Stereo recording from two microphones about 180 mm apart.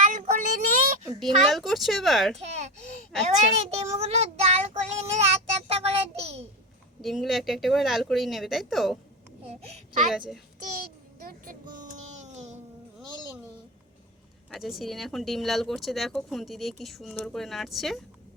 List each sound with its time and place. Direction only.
0.0 s child singing: 45° right (ahead or behind)
1.2 s speech: centre (ahead or behind)
2.4 s babbling: 40° right (ahead or behind)
3.2 s child singing: 35° right (ahead or behind)
7.0 s speech: centre (ahead or behind)
9.5 s a child's voice: 35° right (ahead or behind)
10.1 s speech: centre (ahead or behind)
10.6 s child singing: 55° right (ahead or behind)
11.7 s a sound: 45° right (ahead or behind)
14.5 s speech: centre (ahead or behind)